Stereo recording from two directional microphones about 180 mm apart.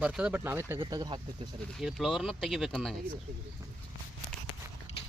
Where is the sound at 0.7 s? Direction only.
25° right (ahead or behind).